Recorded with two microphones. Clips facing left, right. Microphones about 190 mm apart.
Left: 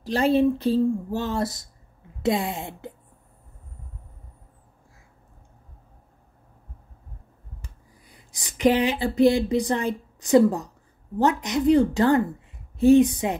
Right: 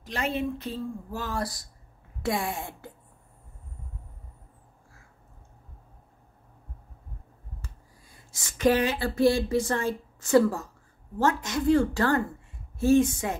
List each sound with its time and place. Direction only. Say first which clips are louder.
0.0 s speech: left 10 dB; 35° left (ahead or behind)
7.6 s a woman's voice: even; 15° left (ahead or behind)